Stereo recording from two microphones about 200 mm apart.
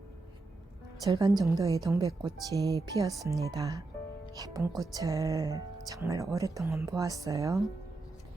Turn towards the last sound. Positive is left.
turn(degrees=-15)  # may be behind; listen again after turning